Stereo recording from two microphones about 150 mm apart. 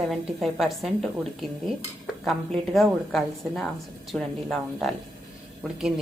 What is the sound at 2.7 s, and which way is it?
A woman's voice, centre (ahead or behind).